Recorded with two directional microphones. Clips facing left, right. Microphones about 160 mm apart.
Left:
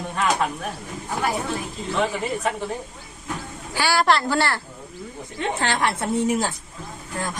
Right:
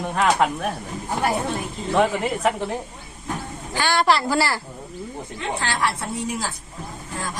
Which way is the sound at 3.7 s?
5° left (ahead or behind).